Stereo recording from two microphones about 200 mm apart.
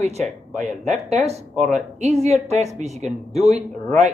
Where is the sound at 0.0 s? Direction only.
35° right (ahead or behind).